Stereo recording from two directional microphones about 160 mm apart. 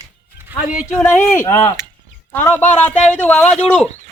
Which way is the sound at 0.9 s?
15° left (ahead or behind).